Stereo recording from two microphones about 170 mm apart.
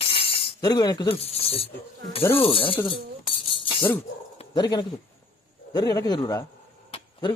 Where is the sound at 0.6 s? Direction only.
25° left (ahead or behind).